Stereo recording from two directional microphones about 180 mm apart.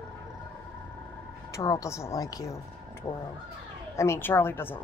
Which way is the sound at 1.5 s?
15° left (ahead or behind).